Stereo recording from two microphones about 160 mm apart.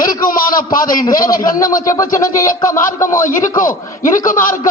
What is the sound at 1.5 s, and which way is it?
Speech, 60° left (ahead or behind).